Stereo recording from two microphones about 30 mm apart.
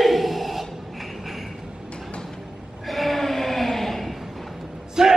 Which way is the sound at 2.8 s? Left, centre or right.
Centre.